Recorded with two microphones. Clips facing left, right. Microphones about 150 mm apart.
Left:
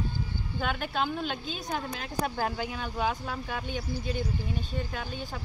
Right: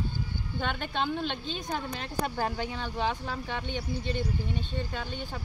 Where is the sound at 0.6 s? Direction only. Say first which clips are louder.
Left 1 dB; 5° left (ahead or behind).